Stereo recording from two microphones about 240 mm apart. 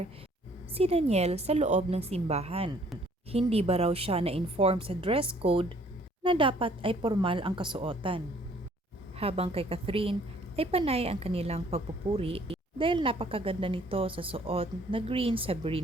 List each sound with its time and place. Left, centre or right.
0.7 s a woman's voice: right